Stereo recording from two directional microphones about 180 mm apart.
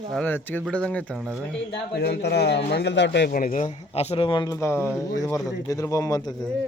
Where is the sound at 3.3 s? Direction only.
50° left (ahead or behind); by 6.5 s 20° left (ahead or behind).